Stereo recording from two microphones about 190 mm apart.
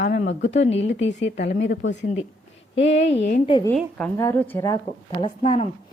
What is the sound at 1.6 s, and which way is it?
Speech, 75° left (ahead or behind).